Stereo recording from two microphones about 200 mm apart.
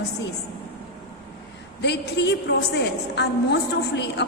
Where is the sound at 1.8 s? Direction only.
55° left (ahead or behind).